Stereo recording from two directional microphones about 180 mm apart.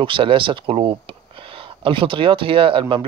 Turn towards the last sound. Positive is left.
turn(degrees=-30)  # may be behind; listen again after turning